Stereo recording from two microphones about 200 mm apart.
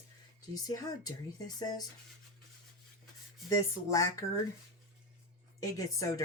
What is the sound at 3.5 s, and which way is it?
Speech, 15° left (ahead or behind).